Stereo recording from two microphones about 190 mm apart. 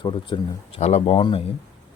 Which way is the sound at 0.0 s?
25° left (ahead or behind).